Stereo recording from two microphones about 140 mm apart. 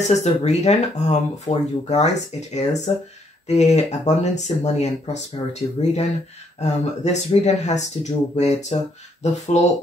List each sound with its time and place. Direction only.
0.0 s speech: 50° left (ahead or behind)